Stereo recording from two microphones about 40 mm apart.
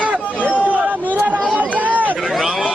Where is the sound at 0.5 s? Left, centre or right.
Right.